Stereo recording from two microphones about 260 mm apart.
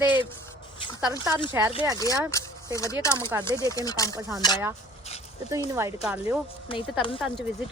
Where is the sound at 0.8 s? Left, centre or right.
Centre.